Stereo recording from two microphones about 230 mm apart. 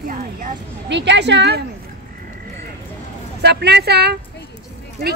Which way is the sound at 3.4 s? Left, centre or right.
Right.